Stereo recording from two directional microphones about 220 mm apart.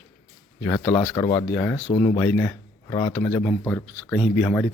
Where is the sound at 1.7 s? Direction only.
20° left (ahead or behind).